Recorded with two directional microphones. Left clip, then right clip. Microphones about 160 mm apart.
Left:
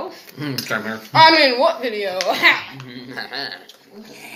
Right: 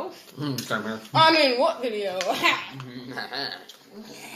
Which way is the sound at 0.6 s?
5° left (ahead or behind).